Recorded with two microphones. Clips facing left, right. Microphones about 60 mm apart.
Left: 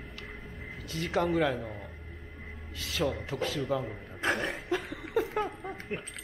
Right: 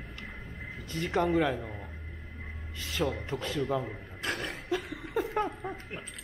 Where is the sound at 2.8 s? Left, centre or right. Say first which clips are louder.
Even; centre.